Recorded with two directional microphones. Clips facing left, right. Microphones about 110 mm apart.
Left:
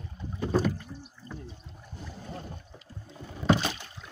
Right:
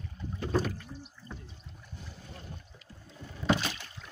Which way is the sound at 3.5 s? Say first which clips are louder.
Left 3 dB; 25° left (ahead or behind).